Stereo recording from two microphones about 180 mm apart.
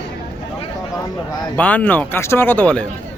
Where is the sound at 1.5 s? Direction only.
10° left (ahead or behind).